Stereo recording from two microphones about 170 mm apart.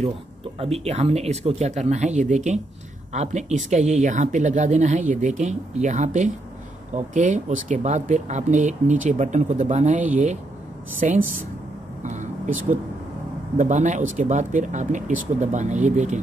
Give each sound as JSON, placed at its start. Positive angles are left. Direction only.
{"t": 0.6, "sound": "speech", "side_deg": -35}
{"t": 12.0, "sound": "a sound", "side_deg": -45}
{"t": 13.6, "sound": "speech", "side_deg": -45}